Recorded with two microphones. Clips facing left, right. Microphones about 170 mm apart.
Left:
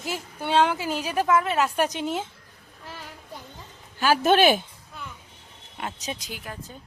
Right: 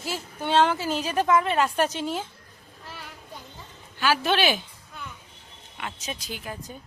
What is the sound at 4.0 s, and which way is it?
Speech, 45° left (ahead or behind).